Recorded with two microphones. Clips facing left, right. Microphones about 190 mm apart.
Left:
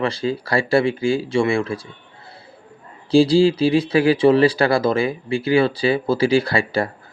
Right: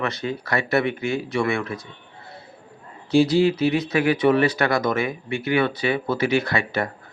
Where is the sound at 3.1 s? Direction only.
30° left (ahead or behind).